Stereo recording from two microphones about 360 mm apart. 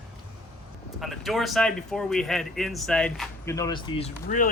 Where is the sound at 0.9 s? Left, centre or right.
Centre.